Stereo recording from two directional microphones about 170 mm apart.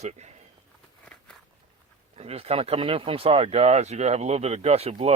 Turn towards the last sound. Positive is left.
turn(degrees=-35)  # may be behind; listen again after turning